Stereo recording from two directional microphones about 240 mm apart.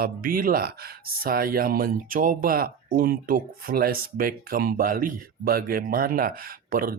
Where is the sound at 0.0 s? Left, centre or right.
Right.